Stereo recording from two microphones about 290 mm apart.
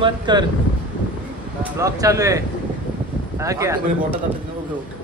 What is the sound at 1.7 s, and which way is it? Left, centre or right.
Speech, centre.